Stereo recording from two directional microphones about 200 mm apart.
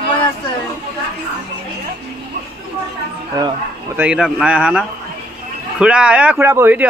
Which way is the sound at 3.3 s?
20° right (ahead or behind).